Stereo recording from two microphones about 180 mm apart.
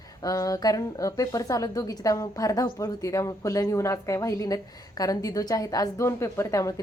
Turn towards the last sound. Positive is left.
turn(degrees=20)  # may be behind; listen again after turning